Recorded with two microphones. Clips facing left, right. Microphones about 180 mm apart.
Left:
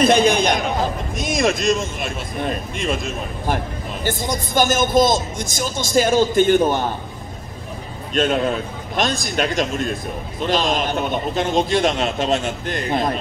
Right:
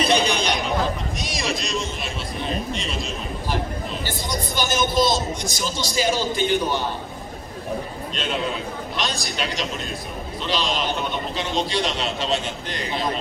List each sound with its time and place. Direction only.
0.0 s chatter: 50° left (ahead or behind)
1.2 s a man's voice: 50° left (ahead or behind)
8.1 s a man's voice: 50° left (ahead or behind)